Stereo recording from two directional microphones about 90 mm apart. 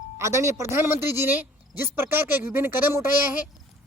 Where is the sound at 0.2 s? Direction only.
35° right (ahead or behind).